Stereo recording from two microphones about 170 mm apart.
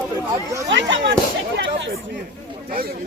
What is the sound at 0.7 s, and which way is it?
Speech, 90° right.